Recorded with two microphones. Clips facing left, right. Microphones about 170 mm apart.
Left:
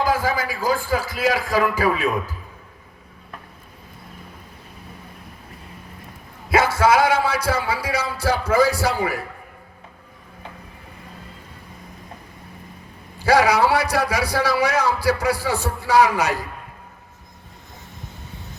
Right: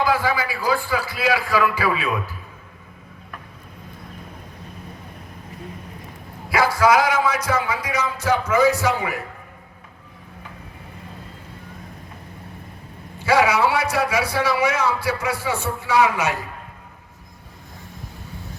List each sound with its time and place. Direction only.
0.0 s a man's voice: 45° left (ahead or behind)
6.5 s a man's voice: 25° left (ahead or behind)
13.1 s a man's voice: 35° left (ahead or behind)